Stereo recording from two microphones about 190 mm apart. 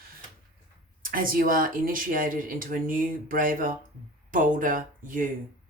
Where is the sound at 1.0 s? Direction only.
50° right (ahead or behind).